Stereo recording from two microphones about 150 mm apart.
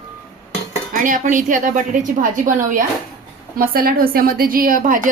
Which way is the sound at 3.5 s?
75° right (ahead or behind).